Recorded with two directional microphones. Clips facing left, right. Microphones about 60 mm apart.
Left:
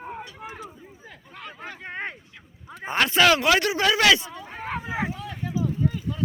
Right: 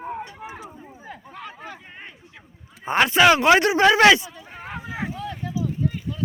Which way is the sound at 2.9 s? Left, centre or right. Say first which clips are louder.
Right 3 dB; centre.